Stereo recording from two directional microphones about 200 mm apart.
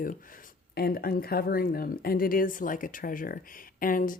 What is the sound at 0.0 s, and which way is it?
Speech, 45° left (ahead or behind).